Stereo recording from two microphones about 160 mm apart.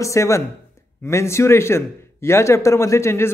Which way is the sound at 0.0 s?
20° left (ahead or behind).